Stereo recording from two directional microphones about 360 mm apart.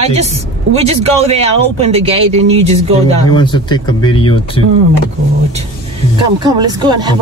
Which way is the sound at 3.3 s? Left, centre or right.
Centre.